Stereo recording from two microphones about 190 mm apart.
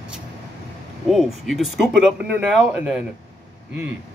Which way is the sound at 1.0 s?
Centre (ahead or behind).